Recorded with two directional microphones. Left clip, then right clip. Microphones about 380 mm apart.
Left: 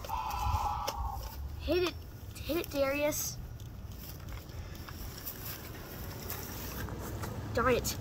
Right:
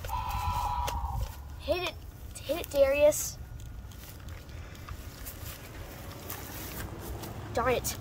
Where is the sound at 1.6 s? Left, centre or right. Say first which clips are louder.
Even; centre.